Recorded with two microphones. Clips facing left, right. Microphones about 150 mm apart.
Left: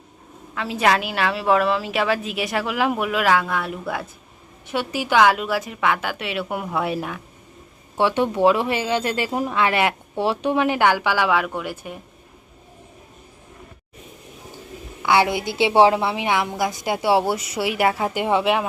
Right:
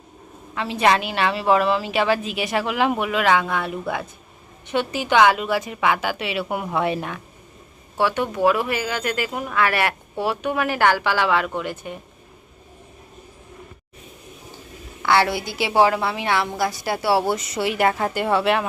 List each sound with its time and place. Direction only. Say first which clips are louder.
0.5 s a woman's voice: right 1 dB; centre (ahead or behind)
7.9 s speech: left 2 dB; 25° left (ahead or behind); by 11.9 s 10° left (ahead or behind)
15.0 s a woman's voice: left 1 dB; 15° left (ahead or behind)